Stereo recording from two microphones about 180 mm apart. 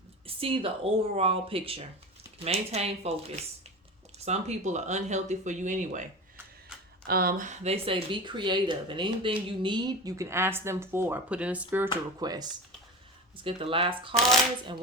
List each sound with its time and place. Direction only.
0.3 s speech: 30° right (ahead or behind)
7.1 s speech: 55° right (ahead or behind); by 11.9 s 10° right (ahead or behind)
12.2 s speech: 20° right (ahead or behind)
14.1 s speech: centre (ahead or behind)